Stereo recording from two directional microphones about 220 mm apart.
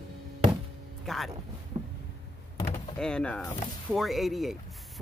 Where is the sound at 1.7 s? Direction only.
25° right (ahead or behind).